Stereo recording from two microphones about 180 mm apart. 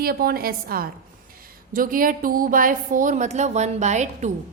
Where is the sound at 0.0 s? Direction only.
55° right (ahead or behind).